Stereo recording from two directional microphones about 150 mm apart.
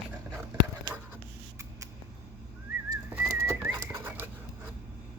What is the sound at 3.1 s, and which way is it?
Pigeon, 15° right (ahead or behind).